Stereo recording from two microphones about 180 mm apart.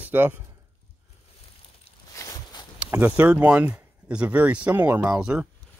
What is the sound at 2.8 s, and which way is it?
Speech, 10° right (ahead or behind).